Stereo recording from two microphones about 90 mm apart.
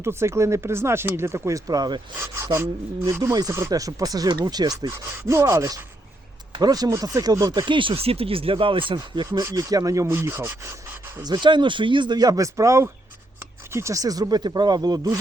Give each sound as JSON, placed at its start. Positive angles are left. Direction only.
{"t": 0.0, "sound": "speech", "side_deg": -30}
{"t": 2.1, "sound": "speech", "side_deg": -30}
{"t": 5.1, "sound": "speech", "side_deg": -35}
{"t": 7.6, "sound": "speech", "side_deg": -65}
{"t": 9.0, "sound": "speech", "side_deg": -50}
{"t": 9.4, "sound": "speech", "side_deg": -35}
{"t": 11.2, "sound": "speech", "side_deg": -55}